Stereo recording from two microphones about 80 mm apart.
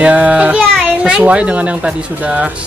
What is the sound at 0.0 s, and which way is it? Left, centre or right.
Speech, centre.